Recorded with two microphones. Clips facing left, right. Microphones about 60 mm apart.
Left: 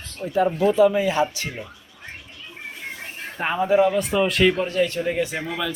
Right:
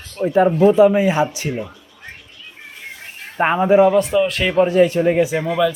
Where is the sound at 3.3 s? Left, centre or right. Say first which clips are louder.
Right 7 dB; right.